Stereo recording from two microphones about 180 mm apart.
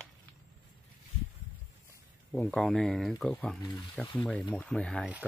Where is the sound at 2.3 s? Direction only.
5° left (ahead or behind).